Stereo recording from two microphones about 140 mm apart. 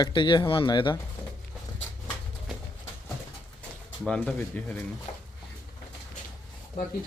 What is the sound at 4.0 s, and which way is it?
Speech, 10° left (ahead or behind).